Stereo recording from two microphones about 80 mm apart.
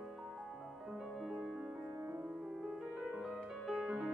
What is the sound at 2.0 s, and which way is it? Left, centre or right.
Music, right.